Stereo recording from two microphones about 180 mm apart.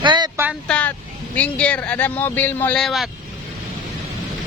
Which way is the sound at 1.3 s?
10° left (ahead or behind).